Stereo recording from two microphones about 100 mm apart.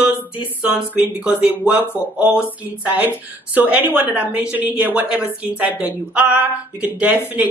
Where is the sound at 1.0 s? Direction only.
10° right (ahead or behind).